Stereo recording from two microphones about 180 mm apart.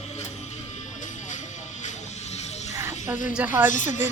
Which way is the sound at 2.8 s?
10° right (ahead or behind).